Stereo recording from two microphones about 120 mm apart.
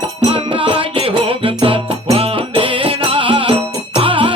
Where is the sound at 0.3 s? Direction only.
50° right (ahead or behind).